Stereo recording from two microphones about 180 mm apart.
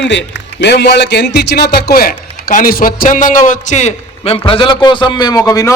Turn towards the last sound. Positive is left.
turn(degrees=20)  # may be behind; listen again after turning